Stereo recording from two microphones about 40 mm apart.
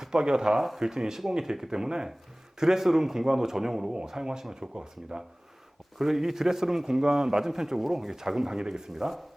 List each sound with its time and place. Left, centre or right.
0.0 s a man's voice: centre
6.0 s a man's voice: centre
8.9 s speech: centre